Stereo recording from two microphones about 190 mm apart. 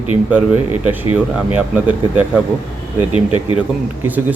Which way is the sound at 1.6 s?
10° right (ahead or behind).